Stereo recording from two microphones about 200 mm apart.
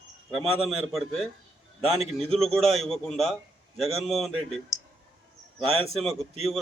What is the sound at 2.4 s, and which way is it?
A man's voice, centre (ahead or behind).